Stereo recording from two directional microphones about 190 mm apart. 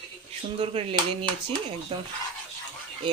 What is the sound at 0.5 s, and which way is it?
Speech, 30° right (ahead or behind).